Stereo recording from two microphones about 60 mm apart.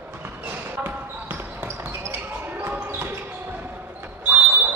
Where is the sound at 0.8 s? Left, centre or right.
Right.